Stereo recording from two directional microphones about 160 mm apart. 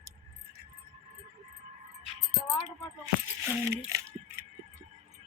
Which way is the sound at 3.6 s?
20° right (ahead or behind).